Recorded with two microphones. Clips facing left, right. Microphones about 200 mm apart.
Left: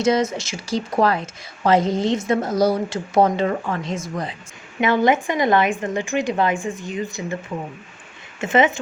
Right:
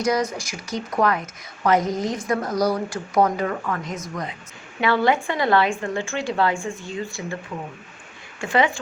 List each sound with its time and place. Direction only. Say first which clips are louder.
0.0 s a woman's voice: left 3 dB; 25° left (ahead or behind)
4.8 s a woman's voice: left 2 dB; 20° left (ahead or behind)
8.4 s a woman's voice: left 3 dB; 20° left (ahead or behind)